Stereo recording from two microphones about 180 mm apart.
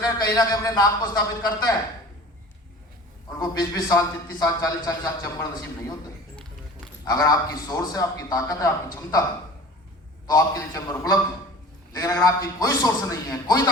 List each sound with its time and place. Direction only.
0.0 s a man's voice: 20° left (ahead or behind)
3.3 s a man's voice: 20° left (ahead or behind)
7.0 s a man's voice: 20° left (ahead or behind)
10.2 s a man's voice: 20° left (ahead or behind)